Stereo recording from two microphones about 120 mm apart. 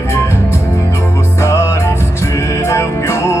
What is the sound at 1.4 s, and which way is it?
Music, 25° left (ahead or behind).